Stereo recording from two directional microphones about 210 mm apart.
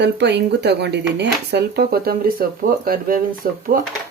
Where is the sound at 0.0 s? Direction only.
55° right (ahead or behind).